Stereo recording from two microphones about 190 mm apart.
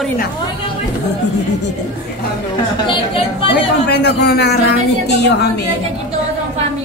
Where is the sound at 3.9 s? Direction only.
60° left (ahead or behind).